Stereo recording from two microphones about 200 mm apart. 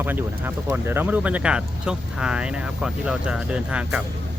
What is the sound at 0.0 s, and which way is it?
Speech, 10° right (ahead or behind).